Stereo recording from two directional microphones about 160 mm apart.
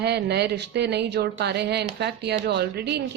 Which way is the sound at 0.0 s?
90° right.